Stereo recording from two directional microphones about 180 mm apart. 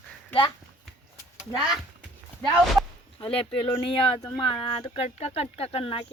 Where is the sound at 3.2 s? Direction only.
30° left (ahead or behind).